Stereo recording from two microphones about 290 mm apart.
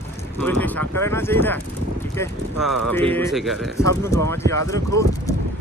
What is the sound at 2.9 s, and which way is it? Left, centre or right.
Speech, centre.